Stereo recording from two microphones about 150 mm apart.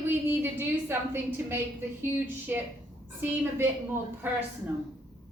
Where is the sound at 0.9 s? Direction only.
15° right (ahead or behind).